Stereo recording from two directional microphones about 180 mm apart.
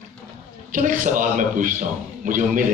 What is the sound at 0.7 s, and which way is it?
A man's voice, 50° right (ahead or behind).